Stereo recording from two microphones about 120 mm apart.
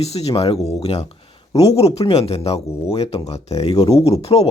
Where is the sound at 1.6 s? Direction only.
60° left (ahead or behind).